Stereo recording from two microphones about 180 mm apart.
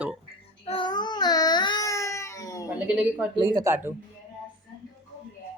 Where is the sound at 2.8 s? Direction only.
5° right (ahead or behind).